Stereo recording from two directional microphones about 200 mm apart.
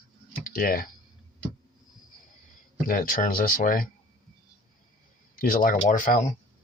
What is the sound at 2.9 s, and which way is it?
Speech, 45° left (ahead or behind).